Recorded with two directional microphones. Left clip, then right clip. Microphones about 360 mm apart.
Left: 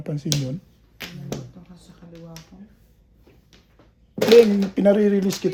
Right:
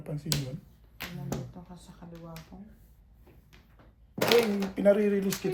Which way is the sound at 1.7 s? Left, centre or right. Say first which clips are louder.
Left 1 dB; centre.